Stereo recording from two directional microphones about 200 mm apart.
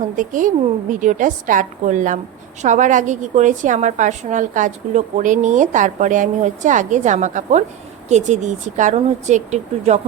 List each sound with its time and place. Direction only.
0.2 s a woman's voice: 40° right (ahead or behind)